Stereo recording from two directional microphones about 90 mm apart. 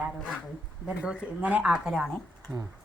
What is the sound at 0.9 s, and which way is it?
Speech, 15° right (ahead or behind).